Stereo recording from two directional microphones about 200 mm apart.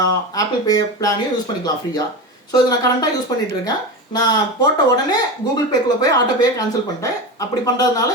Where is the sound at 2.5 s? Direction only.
20° left (ahead or behind).